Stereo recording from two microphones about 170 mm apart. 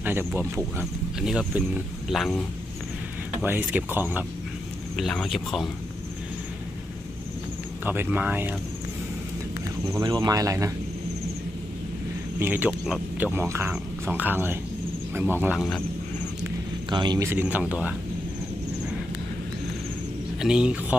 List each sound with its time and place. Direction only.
0.0 s speech: 10° right (ahead or behind)
3.4 s speech: 10° right (ahead or behind)
4.9 s speech: centre (ahead or behind)
7.9 s speech: 10° right (ahead or behind)
9.9 s speech: 25° right (ahead or behind)
12.4 s speech: 10° right (ahead or behind)
16.9 s speech: 25° right (ahead or behind)
17.3 s speech: 10° right (ahead or behind)
20.4 s speech: 5° right (ahead or behind)